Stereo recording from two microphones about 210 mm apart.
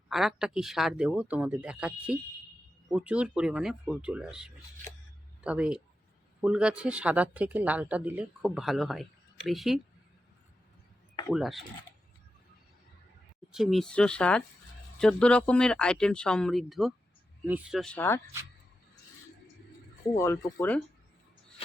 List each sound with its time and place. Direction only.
0.1 s speech: centre (ahead or behind)
11.3 s speech: centre (ahead or behind)
13.5 s speech: centre (ahead or behind)
20.1 s speech: 15° left (ahead or behind)